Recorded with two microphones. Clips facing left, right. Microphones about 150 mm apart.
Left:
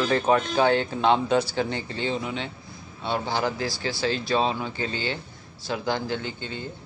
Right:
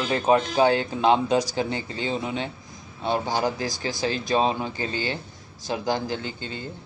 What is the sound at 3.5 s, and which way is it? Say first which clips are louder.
Speech: even; 45° right (ahead or behind).